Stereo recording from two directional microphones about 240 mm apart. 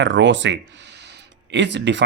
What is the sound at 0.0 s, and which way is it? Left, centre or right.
Speech, right.